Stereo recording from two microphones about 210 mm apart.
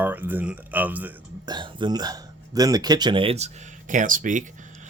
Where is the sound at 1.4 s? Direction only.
20° right (ahead or behind).